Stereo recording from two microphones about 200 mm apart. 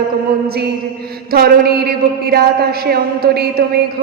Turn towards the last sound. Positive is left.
turn(degrees=-55)  # may be behind; listen again after turning